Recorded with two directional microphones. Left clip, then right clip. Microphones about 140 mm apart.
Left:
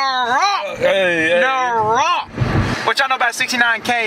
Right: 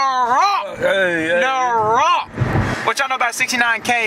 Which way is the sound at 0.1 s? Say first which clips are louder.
Right 1 dB; 15° right (ahead or behind).